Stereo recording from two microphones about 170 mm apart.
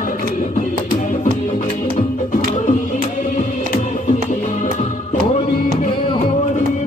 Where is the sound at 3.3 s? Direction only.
45° left (ahead or behind).